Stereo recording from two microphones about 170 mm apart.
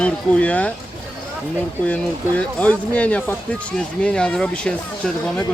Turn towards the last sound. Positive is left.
turn(degrees=5)  # may be behind; listen again after turning